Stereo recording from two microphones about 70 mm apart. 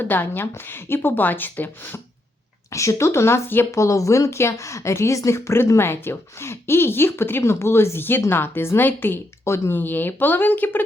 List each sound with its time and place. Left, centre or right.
0.0 s a woman's voice: left
2.7 s speech: left
3.7 s speech: left